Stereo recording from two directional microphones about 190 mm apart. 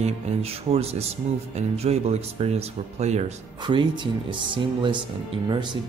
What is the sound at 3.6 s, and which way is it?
Speech, 25° right (ahead or behind).